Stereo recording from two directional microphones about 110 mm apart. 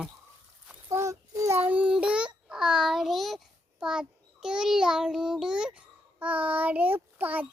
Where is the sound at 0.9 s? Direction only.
30° right (ahead or behind).